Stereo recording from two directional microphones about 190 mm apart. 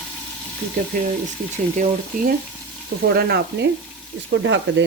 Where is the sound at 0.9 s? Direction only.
50° right (ahead or behind).